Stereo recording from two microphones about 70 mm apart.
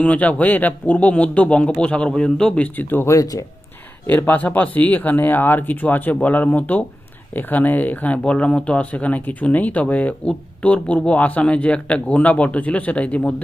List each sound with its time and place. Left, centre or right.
0.0 s speech: centre
2.7 s speech: left
3.1 s speech: left
4.0 s speech: left